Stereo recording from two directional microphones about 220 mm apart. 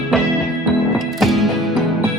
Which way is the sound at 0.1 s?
Centre (ahead or behind).